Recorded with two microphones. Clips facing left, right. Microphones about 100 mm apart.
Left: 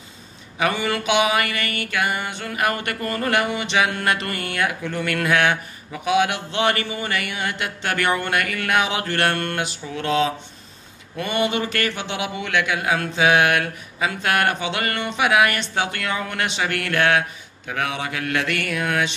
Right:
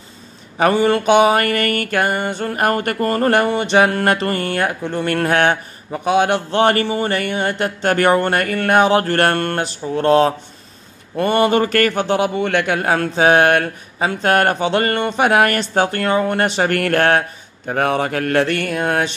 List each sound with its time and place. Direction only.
0.6 s mantra: 40° right (ahead or behind)
11.1 s a man's voice: 45° right (ahead or behind)
17.6 s mantra: 45° right (ahead or behind)